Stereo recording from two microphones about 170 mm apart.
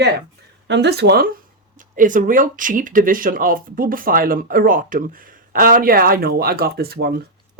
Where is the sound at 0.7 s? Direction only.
80° right.